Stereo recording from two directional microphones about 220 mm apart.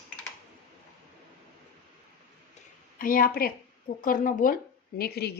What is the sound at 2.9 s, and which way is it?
A woman's voice, 40° left (ahead or behind).